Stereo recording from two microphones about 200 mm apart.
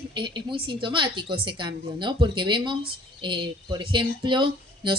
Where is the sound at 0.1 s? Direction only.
25° right (ahead or behind).